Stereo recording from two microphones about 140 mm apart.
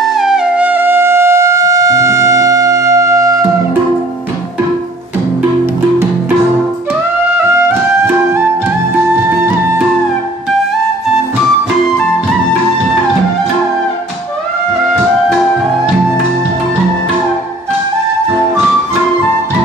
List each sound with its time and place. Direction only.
0.0 s music: 5° right (ahead or behind); by 3.4 s 25° right (ahead or behind)
7.3 s music: 15° right (ahead or behind)